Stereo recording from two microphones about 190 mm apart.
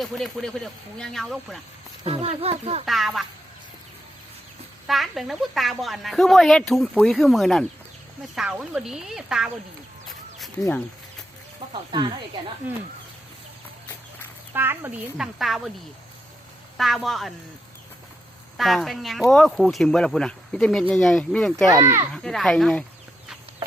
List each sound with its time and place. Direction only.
0.0 s speech: centre (ahead or behind)
2.0 s speech: 30° right (ahead or behind)
2.8 s speech: centre (ahead or behind)
4.9 s speech: centre (ahead or behind)
10.6 s speech: 10° left (ahead or behind)
11.7 s speech: 25° right (ahead or behind)
12.6 s speech: 10° right (ahead or behind)
14.5 s speech: 10° right (ahead or behind)
16.7 s speech: centre (ahead or behind)
18.5 s speech: centre (ahead or behind)
21.7 s speech: 15° right (ahead or behind)
22.1 s speech: 5° left (ahead or behind)